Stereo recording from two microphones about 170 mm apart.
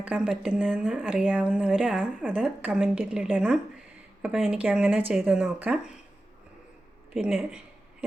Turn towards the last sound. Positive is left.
turn(degrees=-5)  # may be behind; listen again after turning